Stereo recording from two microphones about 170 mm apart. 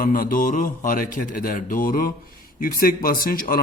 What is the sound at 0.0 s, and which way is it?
Speech, 55° left (ahead or behind).